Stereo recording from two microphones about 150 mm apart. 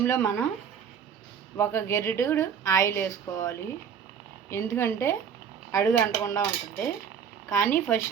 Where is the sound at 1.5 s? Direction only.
20° left (ahead or behind).